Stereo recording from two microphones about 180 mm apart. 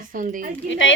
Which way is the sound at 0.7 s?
90° left.